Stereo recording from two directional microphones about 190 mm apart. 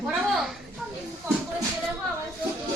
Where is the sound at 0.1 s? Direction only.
Centre (ahead or behind).